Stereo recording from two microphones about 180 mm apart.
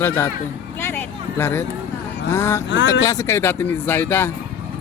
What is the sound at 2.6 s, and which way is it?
Speech, 90° left.